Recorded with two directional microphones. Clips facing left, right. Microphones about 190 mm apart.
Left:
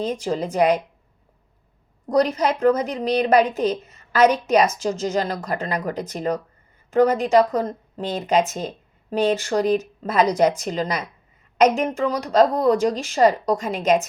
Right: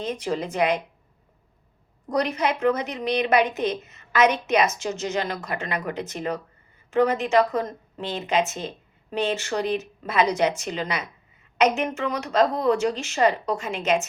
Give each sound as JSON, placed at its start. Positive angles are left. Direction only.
{"t": 0.0, "sound": "a woman's voice", "side_deg": 35}
{"t": 2.0, "sound": "a woman's voice", "side_deg": 35}